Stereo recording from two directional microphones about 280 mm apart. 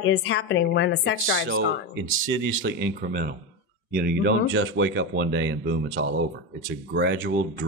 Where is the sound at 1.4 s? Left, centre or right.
Right.